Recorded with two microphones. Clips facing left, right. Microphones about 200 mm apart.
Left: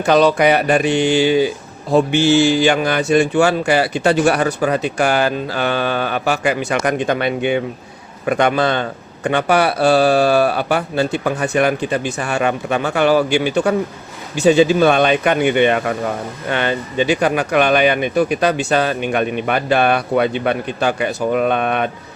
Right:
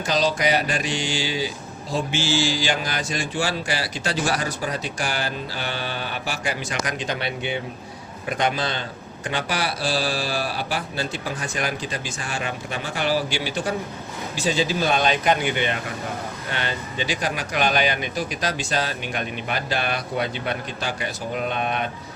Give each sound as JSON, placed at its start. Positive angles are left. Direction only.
{"t": 0.0, "sound": "speech", "side_deg": 60}
{"t": 5.5, "sound": "mantra", "side_deg": 55}
{"t": 6.7, "sound": "speech", "side_deg": 55}